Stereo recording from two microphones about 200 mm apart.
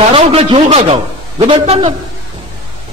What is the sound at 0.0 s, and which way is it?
A man's voice, 30° right (ahead or behind).